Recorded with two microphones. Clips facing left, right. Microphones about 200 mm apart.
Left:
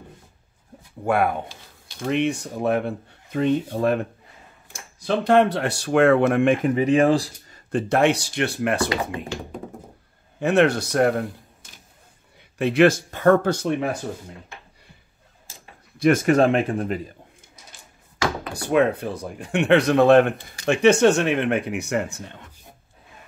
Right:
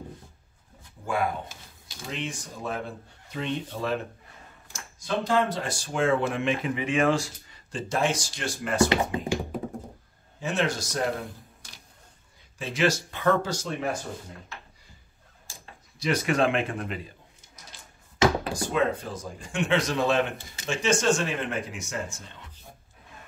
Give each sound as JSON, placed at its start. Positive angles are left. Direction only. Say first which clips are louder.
{"t": 1.0, "sound": "speech", "louder": "left 7 dB", "side_deg": 60}
{"t": 9.5, "sound": "thunk", "louder": "right 2 dB", "side_deg": -5}
{"t": 10.4, "sound": "speech", "louder": "left 10 dB", "side_deg": 60}
{"t": 12.4, "sound": "speech", "louder": "left 11 dB", "side_deg": 65}
{"t": 16.0, "sound": "a man's voice", "louder": "left 8 dB", "side_deg": 50}
{"t": 18.5, "sound": "speech", "louder": "left 6 dB", "side_deg": 60}